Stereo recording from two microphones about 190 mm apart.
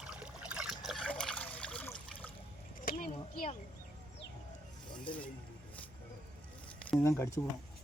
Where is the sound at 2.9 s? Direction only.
50° left (ahead or behind).